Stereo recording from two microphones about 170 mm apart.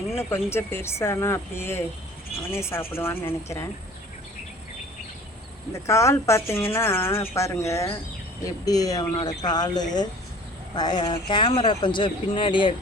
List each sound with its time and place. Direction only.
0.2 s speech: 15° left (ahead or behind)
5.8 s speech: 15° left (ahead or behind)